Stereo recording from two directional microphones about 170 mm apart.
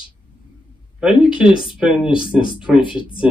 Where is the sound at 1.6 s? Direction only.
5° right (ahead or behind).